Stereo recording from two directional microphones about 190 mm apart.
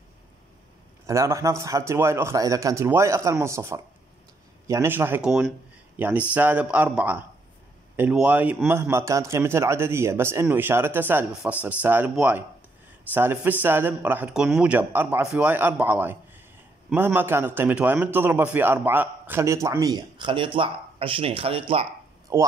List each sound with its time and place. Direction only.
1.0 s a man's voice: 15° right (ahead or behind)
22.3 s a man's voice: 15° right (ahead or behind)